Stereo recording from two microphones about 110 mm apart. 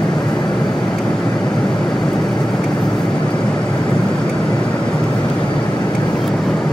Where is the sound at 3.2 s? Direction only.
40° left (ahead or behind).